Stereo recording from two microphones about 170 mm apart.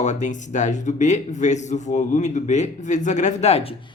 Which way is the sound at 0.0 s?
45° left (ahead or behind).